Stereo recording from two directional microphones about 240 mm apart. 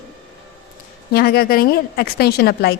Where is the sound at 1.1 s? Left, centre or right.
Left.